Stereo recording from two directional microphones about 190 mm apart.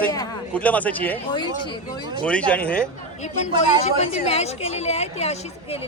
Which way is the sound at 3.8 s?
35° left (ahead or behind).